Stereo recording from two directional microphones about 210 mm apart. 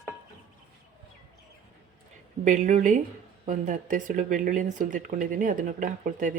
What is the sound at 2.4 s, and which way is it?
Speech, 35° right (ahead or behind).